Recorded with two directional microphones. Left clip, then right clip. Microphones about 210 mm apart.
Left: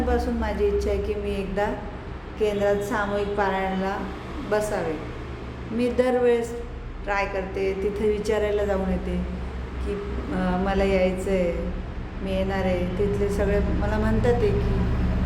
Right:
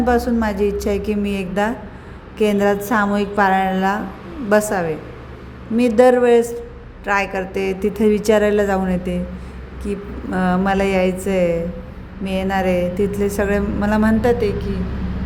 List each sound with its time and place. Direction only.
0.1 s a woman's voice: 50° right (ahead or behind)